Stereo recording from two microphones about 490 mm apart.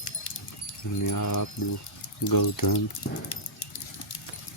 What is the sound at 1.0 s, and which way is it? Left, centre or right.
Speech, left.